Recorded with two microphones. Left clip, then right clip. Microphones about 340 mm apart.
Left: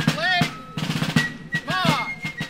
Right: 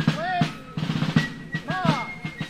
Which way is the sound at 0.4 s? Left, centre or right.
Left.